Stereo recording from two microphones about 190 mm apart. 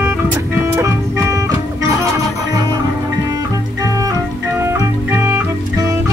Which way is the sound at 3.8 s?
15° right (ahead or behind).